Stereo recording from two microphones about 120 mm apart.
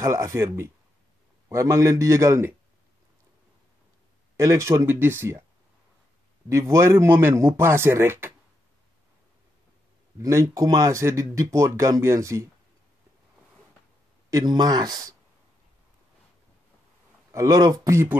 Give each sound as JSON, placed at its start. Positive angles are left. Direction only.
{"t": 0.0, "sound": "speech", "side_deg": -25}
{"t": 1.5, "sound": "speech", "side_deg": -25}
{"t": 4.4, "sound": "speech", "side_deg": -25}
{"t": 6.5, "sound": "speech", "side_deg": -25}
{"t": 10.2, "sound": "speech", "side_deg": -25}
{"t": 14.3, "sound": "speech", "side_deg": -35}
{"t": 17.3, "sound": "speech", "side_deg": -30}